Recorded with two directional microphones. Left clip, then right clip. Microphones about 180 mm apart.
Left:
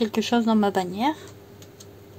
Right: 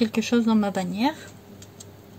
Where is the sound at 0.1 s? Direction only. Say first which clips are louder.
Left 1 dB; 35° left (ahead or behind).